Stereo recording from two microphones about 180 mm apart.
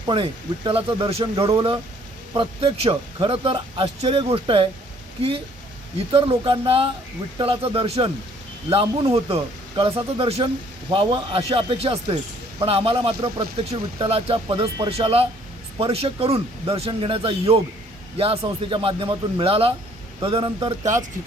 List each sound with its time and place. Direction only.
0.0 s speech: 25° right (ahead or behind)
6.1 s speech: 30° right (ahead or behind)
9.1 s speech: 30° right (ahead or behind)